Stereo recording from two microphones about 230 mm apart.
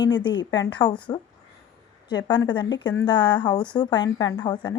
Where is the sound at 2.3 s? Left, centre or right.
Centre.